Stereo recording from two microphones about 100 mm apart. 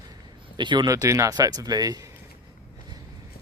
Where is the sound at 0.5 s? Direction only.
50° right (ahead or behind).